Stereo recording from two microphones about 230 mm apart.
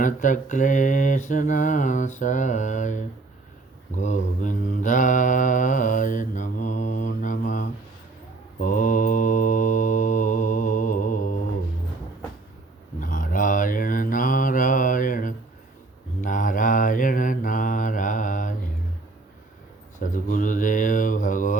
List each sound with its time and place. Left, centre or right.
0.0 s mantra: left
13.0 s mantra: left
20.0 s a sound: left